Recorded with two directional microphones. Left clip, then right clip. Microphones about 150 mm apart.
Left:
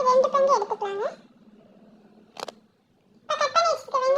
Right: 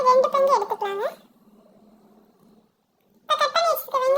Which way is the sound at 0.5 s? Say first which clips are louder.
Right 2 dB; 45° right (ahead or behind).